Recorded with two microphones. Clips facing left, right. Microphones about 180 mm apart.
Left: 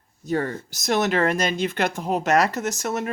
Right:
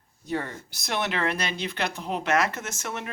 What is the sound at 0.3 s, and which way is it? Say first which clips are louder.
Speech: left 6 dB; 45° left (ahead or behind).